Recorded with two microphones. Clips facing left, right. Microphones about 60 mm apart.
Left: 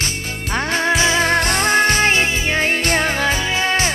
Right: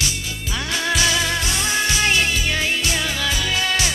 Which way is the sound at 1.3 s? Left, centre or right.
Left.